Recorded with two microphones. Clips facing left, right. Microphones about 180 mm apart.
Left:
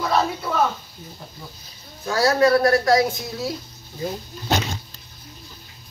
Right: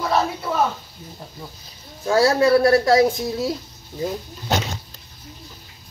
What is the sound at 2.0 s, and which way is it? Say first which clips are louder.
Speech: right 2 dB; 30° right (ahead or behind).